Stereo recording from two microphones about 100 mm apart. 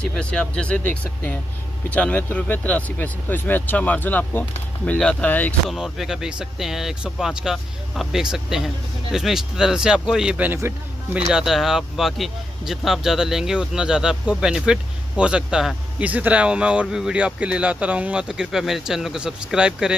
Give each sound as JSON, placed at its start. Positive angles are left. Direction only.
{"t": 0.0, "sound": "speech", "side_deg": 10}
{"t": 5.7, "sound": "speech", "side_deg": -5}
{"t": 11.3, "sound": "speech", "side_deg": -5}